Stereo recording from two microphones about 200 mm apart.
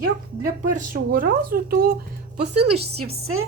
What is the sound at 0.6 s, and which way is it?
Speech, 45° right (ahead or behind).